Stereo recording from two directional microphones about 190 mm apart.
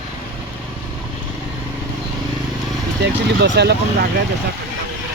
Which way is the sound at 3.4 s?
65° right (ahead or behind).